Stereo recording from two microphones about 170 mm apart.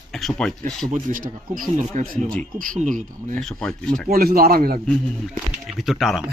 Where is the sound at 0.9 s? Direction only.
50° right (ahead or behind).